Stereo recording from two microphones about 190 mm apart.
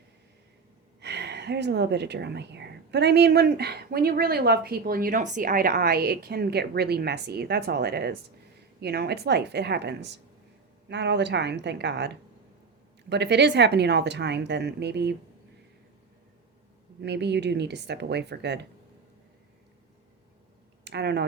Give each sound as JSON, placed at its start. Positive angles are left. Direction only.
{"t": 1.0, "sound": "speech", "side_deg": -60}
{"t": 17.0, "sound": "speech", "side_deg": -60}
{"t": 20.8, "sound": "speech", "side_deg": -60}